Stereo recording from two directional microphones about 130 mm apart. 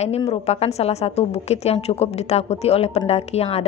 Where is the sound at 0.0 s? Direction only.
50° left (ahead or behind).